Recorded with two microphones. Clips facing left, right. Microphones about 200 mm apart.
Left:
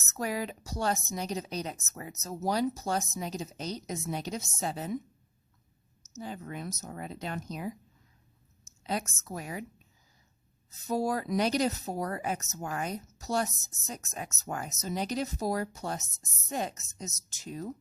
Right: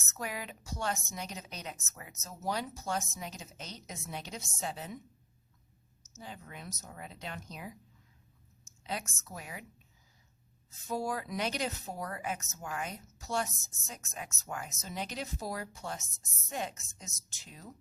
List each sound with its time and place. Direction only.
0.1 s a woman's voice: 35° left (ahead or behind)
6.1 s speech: 45° left (ahead or behind)
8.8 s a woman's voice: 40° left (ahead or behind)